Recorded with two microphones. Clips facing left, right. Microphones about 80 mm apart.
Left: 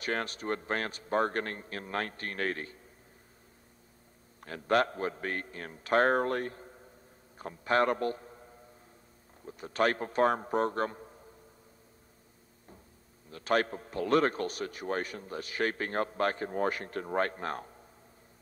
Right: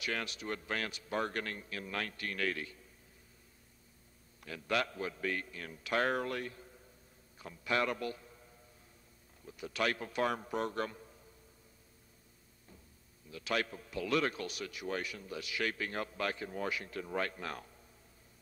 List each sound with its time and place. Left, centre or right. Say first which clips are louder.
0.0 s a man's voice: left 5 dB; left
4.4 s a man's voice: left 7 dB; left
13.3 s a man's voice: left 7 dB; left